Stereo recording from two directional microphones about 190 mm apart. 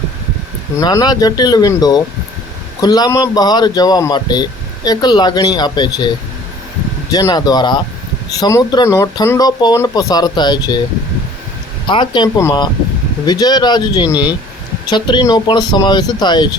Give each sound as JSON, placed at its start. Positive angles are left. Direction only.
{"t": 0.8, "sound": "speech", "side_deg": 20}
{"t": 7.1, "sound": "speech", "side_deg": 20}
{"t": 11.9, "sound": "speech", "side_deg": 25}